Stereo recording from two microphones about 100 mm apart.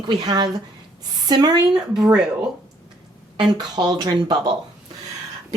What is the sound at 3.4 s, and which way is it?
Speech, 45° right (ahead or behind).